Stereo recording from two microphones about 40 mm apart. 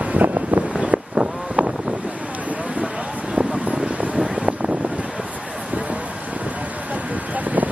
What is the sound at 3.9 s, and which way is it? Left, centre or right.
Vehicle, right.